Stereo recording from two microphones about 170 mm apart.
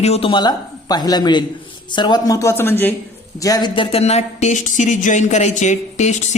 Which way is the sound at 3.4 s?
25° left (ahead or behind).